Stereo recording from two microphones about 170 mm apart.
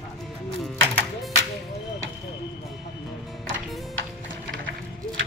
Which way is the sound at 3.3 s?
Centre (ahead or behind).